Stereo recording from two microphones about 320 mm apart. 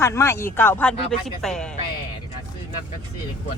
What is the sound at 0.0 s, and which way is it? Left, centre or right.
Speech, centre.